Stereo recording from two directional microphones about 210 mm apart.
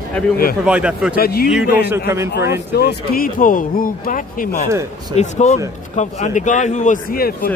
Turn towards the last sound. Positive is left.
turn(degrees=45)  # may be behind; listen again after turning